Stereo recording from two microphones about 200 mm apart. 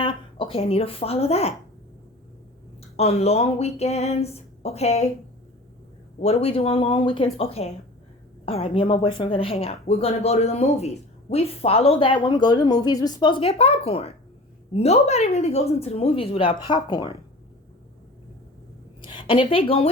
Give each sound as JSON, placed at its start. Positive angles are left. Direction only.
{"t": 0.0, "sound": "speech", "side_deg": 25}
{"t": 2.9, "sound": "a sound", "side_deg": 30}
{"t": 6.1, "sound": "speech", "side_deg": 30}
{"t": 14.7, "sound": "a sound", "side_deg": 30}
{"t": 16.6, "sound": "speech", "side_deg": 20}
{"t": 19.0, "sound": "a woman's voice", "side_deg": 25}